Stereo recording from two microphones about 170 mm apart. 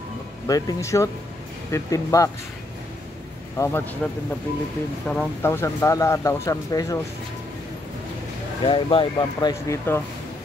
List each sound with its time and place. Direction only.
0.5 s speech: 20° left (ahead or behind)
3.5 s speech: 15° left (ahead or behind)
8.6 s speech: 30° left (ahead or behind)